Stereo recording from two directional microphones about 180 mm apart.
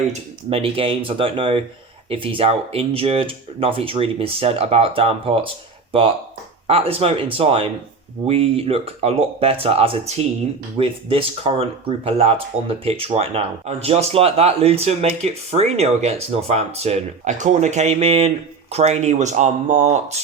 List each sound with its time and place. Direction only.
0.1 s speech: 30° right (ahead or behind)